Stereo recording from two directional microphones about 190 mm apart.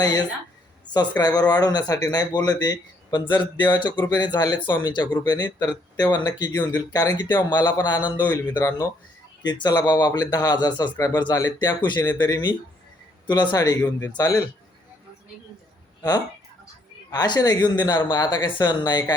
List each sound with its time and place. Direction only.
0.0 s speech: 20° left (ahead or behind)
17.1 s speech: 20° left (ahead or behind)